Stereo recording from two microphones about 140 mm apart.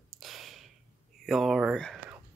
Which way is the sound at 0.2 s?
Centre (ahead or behind).